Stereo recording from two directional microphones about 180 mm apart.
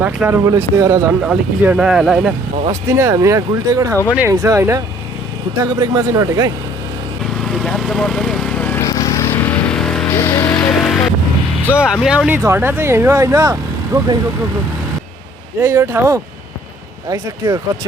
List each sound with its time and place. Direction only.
0.0 s speech: 10° right (ahead or behind)
1.2 s speech: 5° right (ahead or behind)
2.6 s speech: 15° right (ahead or behind)
7.4 s vehicle: centre (ahead or behind)
8.9 s vehicle: 20° left (ahead or behind)
9.7 s music: 5° left (ahead or behind)
10.2 s music: 15° left (ahead or behind)
11.7 s speech: 5° right (ahead or behind)
15.6 s speech: 15° right (ahead or behind)